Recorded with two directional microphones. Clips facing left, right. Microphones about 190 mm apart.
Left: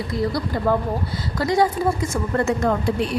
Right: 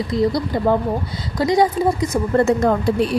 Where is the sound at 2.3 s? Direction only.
30° right (ahead or behind).